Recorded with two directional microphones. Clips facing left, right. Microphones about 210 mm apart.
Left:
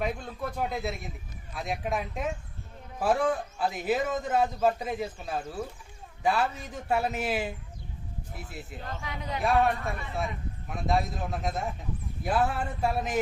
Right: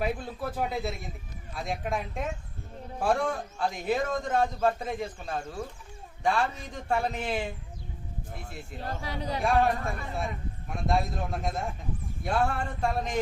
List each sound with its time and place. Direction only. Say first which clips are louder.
0.0 s a man's voice: right 1 dB; 5° right (ahead or behind)
8.8 s a man's voice: right 5 dB; 35° right (ahead or behind)
10.8 s a man's voice: even; centre (ahead or behind)